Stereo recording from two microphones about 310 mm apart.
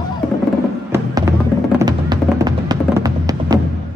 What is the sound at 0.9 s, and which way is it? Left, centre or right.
Music, centre.